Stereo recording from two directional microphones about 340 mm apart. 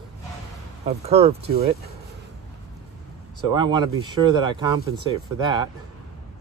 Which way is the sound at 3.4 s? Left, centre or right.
Centre.